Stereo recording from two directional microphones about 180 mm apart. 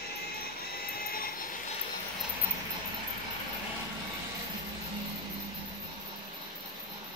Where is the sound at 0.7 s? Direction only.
55° left (ahead or behind).